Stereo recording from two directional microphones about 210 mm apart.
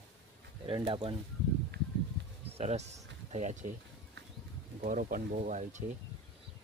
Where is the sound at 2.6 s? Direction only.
30° right (ahead or behind).